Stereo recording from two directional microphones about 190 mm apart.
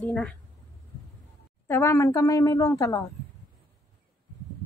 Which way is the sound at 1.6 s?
15° left (ahead or behind).